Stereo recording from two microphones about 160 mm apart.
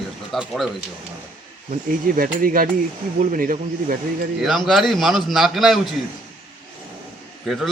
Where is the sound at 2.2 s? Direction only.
60° right (ahead or behind).